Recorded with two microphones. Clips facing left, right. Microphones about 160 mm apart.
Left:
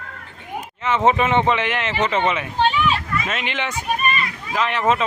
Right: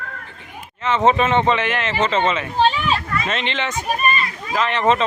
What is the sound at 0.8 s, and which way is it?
Speech, 10° left (ahead or behind).